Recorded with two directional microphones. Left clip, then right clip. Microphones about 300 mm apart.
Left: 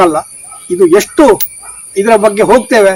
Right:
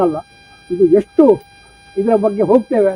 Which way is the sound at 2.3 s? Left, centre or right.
Left.